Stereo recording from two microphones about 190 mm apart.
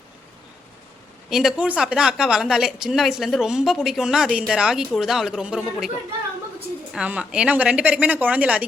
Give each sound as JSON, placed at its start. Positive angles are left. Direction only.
{"t": 1.3, "sound": "a woman's voice", "side_deg": -5}